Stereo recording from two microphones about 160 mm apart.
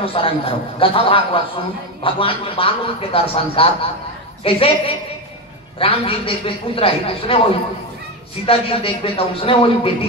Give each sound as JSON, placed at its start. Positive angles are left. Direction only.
{"t": 0.0, "sound": "a man's voice", "side_deg": 35}
{"t": 8.5, "sound": "a man's voice", "side_deg": 35}